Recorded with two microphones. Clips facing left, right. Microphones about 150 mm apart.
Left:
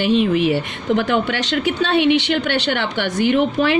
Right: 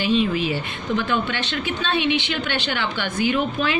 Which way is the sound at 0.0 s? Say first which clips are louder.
Left 5 dB; 65° left (ahead or behind).